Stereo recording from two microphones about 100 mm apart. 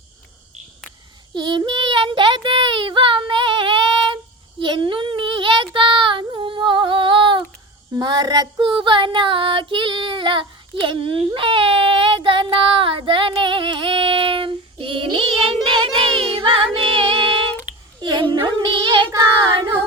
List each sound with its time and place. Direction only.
1.3 s child singing: 50° right (ahead or behind)
7.9 s child singing: 40° right (ahead or behind)
8.7 s child singing: 55° right (ahead or behind)
15.6 s music: 55° right (ahead or behind)
18.0 s a sound: 45° right (ahead or behind)
18.4 s child singing: 45° right (ahead or behind)